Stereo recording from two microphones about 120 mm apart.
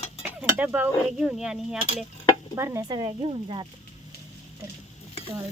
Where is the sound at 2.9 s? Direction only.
40° right (ahead or behind).